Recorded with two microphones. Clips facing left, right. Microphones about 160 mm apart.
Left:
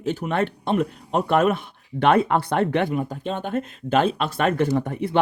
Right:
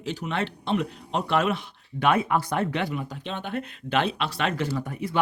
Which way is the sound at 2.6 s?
45° left (ahead or behind).